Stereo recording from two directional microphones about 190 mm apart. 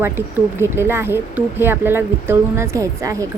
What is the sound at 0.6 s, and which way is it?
A woman's voice, 10° right (ahead or behind).